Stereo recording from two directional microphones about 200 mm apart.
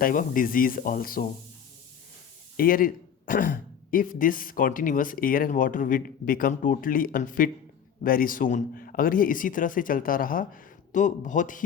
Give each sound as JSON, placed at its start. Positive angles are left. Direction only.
{"t": 0.0, "sound": "speech", "side_deg": 45}
{"t": 2.6, "sound": "speech", "side_deg": 45}